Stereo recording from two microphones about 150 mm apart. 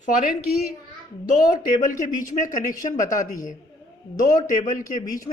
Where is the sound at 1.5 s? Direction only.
65° left (ahead or behind).